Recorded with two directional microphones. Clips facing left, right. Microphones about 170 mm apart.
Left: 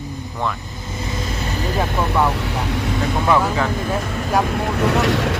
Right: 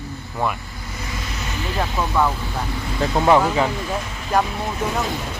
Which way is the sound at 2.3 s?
80° left.